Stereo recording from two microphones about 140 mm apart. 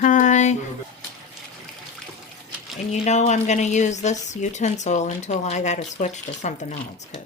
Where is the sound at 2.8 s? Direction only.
55° left (ahead or behind).